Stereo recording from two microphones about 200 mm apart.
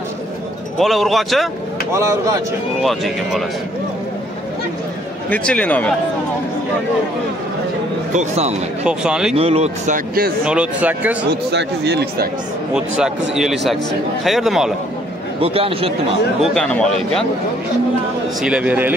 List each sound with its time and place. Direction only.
0.7 s speech: centre (ahead or behind)
2.0 s speech: 15° right (ahead or behind)
2.8 s speech: centre (ahead or behind)
5.3 s a man's voice: 5° left (ahead or behind)
8.1 s speech: 35° right (ahead or behind)
8.8 s speech: 5° right (ahead or behind)
9.3 s speech: 30° right (ahead or behind)
10.4 s speech: 5° right (ahead or behind)
11.2 s speech: 55° right (ahead or behind)
12.7 s speech: 5° right (ahead or behind)
15.4 s speech: 30° right (ahead or behind)
16.4 s speech: 5° left (ahead or behind)
18.4 s speech: 5° right (ahead or behind)